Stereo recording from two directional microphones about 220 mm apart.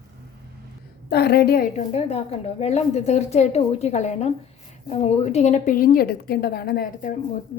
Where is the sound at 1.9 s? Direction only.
30° left (ahead or behind).